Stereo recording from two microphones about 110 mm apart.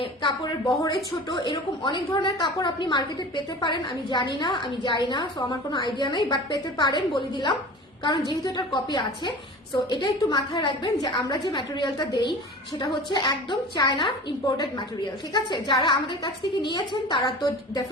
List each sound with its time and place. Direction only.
0.0 s a woman's voice: 50° left (ahead or behind)